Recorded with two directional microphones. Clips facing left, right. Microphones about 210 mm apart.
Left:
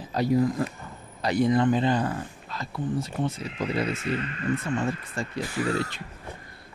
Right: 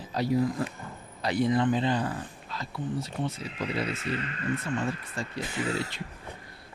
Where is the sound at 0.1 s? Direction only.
50° left (ahead or behind).